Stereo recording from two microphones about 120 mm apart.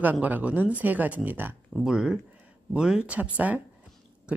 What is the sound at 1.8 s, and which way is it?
Speech, 5° right (ahead or behind).